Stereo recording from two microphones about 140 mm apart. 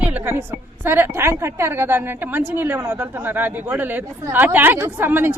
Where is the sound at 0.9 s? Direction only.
15° right (ahead or behind).